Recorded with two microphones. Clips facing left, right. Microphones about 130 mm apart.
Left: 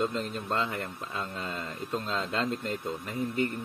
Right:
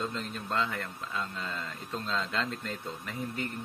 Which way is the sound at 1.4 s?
35° left (ahead or behind).